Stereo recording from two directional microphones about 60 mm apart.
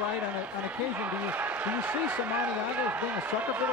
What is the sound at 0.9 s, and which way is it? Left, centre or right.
A man's voice, right.